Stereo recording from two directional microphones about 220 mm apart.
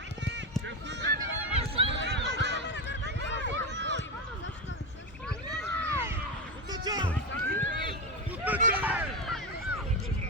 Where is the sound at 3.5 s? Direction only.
55° right (ahead or behind).